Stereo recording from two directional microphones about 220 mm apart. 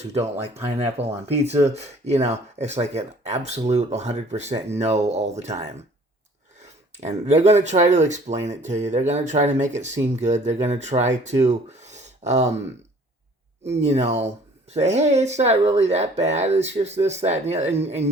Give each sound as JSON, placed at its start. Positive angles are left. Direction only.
{"t": 0.1, "sound": "speech", "side_deg": -30}
{"t": 7.0, "sound": "speech", "side_deg": -30}
{"t": 13.7, "sound": "speech", "side_deg": -30}